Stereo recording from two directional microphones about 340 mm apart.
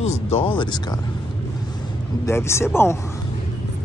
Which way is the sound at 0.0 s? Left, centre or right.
Centre.